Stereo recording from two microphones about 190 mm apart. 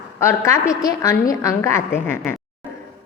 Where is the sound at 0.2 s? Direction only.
15° left (ahead or behind).